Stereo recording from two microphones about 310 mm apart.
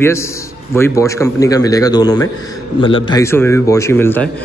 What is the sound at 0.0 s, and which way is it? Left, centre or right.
A man's voice, centre.